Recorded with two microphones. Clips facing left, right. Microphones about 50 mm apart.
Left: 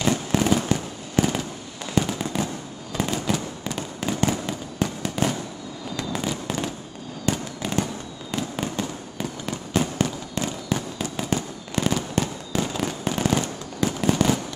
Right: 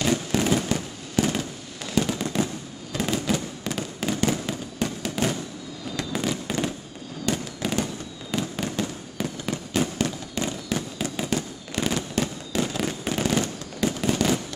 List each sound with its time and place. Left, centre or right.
0.0 s fireworks: centre